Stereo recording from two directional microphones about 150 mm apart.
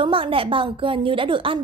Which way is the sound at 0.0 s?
35° right (ahead or behind).